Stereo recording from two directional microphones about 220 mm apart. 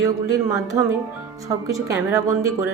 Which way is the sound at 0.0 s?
15° right (ahead or behind).